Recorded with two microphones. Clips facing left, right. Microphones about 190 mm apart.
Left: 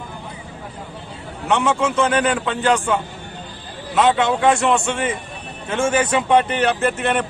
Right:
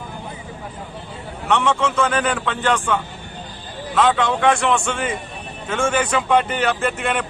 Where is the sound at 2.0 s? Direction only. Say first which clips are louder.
Left 2 dB; 30° left (ahead or behind).